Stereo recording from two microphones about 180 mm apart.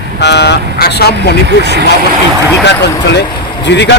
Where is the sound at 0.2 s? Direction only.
70° left (ahead or behind).